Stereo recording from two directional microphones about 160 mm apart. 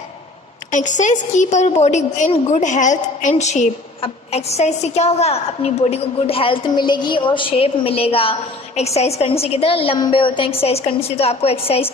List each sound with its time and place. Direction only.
0.7 s a woman's voice: 50° left (ahead or behind)